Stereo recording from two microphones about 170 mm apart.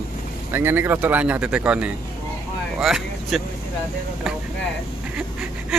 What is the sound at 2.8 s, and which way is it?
Vehicle, centre (ahead or behind).